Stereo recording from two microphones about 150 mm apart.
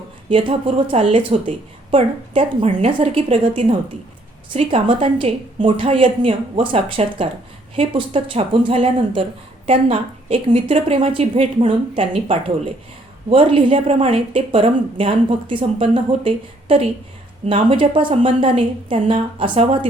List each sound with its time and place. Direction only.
0.3 s a woman's voice: 35° right (ahead or behind)